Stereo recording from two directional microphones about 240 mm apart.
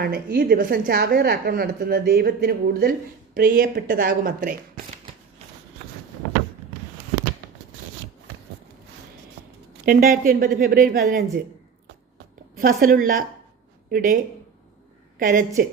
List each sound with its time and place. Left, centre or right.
0.0 s a woman's voice: right
9.8 s a woman's voice: right
12.5 s a woman's voice: right
15.2 s a woman's voice: right